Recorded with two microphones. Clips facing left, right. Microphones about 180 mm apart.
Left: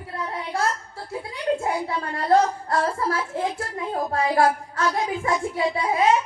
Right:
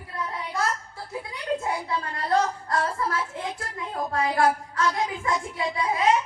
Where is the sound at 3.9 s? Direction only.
30° left (ahead or behind).